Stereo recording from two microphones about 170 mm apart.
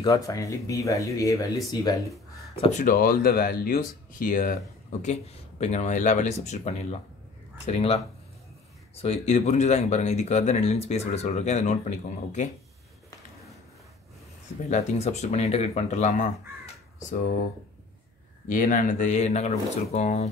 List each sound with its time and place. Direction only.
0.0 s speech: 20° left (ahead or behind)
2.6 s speech: 45° left (ahead or behind)
5.6 s speech: 40° left (ahead or behind)
14.7 s speech: 40° left (ahead or behind)
18.5 s speech: 50° left (ahead or behind)